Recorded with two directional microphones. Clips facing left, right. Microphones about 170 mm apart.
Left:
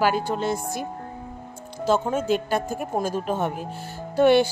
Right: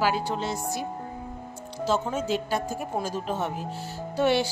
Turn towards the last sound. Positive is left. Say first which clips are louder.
# left 6 dB
turn(degrees=55)  # may be behind; listen again after turning